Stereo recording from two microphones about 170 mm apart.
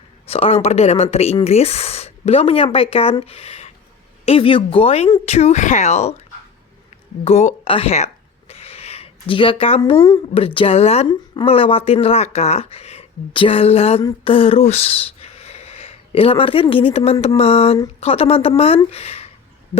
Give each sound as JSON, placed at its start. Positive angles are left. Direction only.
{"t": 0.3, "sound": "speech", "side_deg": 35}
{"t": 7.3, "sound": "speech", "side_deg": 40}